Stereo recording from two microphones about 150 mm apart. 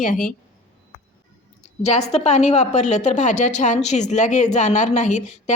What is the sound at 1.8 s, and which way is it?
A woman's voice, 45° left (ahead or behind).